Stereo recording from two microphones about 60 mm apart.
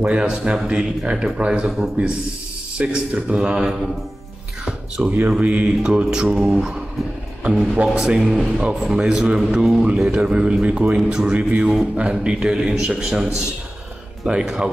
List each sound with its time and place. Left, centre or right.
0.0 s a man's voice: centre
5.0 s a man's voice: right
6.3 s speech: centre
7.7 s a man's voice: centre